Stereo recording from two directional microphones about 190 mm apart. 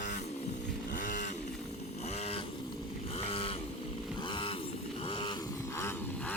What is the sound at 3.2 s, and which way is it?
Vehicle, 30° left (ahead or behind).